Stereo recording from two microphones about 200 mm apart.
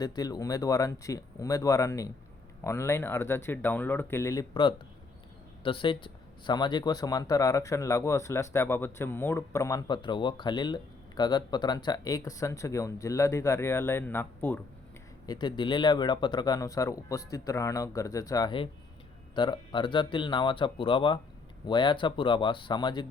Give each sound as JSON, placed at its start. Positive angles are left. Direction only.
{"t": 0.0, "sound": "speech", "side_deg": 20}
{"t": 15.3, "sound": "speech", "side_deg": 20}